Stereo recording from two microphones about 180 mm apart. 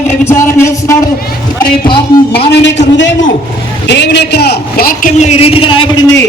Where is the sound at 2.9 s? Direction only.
90° left.